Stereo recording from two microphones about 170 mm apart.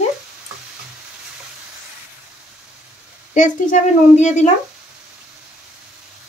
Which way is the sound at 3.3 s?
45° left (ahead or behind).